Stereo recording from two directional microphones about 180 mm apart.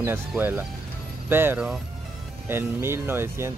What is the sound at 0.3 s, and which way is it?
Speech, 10° right (ahead or behind).